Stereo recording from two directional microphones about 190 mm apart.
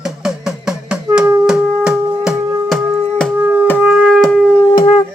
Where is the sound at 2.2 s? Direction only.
10° right (ahead or behind).